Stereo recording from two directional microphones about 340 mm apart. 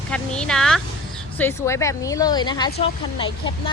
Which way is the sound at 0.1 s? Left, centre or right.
Centre.